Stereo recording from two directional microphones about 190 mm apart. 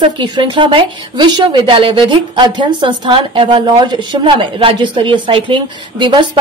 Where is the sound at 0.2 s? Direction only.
25° right (ahead or behind).